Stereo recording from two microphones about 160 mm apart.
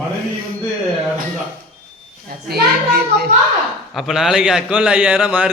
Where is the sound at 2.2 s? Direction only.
75° right (ahead or behind).